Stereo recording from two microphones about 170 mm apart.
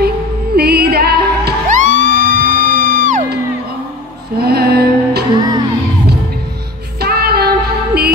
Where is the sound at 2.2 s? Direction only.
65° left (ahead or behind).